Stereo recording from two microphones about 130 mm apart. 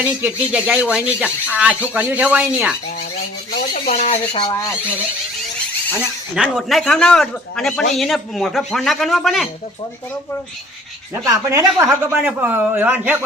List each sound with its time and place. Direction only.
0.0 s speech: 10° right (ahead or behind)
3.8 s speech: 60° left (ahead or behind)
4.4 s speech: 35° left (ahead or behind)
6.3 s speech: centre (ahead or behind)
11.3 s speech: 25° right (ahead or behind)
11.9 s speech: 5° right (ahead or behind)
12.4 s speech: 15° right (ahead or behind)